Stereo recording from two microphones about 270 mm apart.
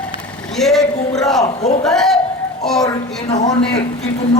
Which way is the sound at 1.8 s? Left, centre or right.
Centre.